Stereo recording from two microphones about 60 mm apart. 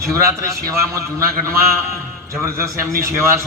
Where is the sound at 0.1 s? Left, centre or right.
Right.